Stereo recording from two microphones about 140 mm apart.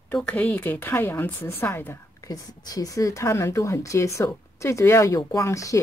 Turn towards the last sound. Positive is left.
turn(degrees=20)  # may be behind; listen again after turning